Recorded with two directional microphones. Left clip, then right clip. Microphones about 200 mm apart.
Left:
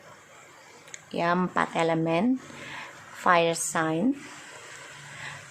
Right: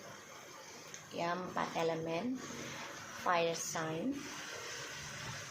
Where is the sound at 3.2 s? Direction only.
40° left (ahead or behind).